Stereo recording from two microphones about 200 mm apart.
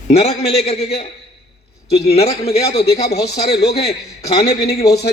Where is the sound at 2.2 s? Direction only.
30° left (ahead or behind).